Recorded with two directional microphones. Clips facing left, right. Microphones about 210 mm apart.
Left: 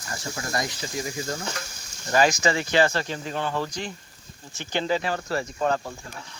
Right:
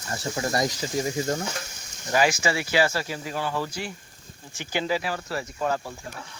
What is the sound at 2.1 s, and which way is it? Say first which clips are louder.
Speech: left 2 dB; 10° right (ahead or behind).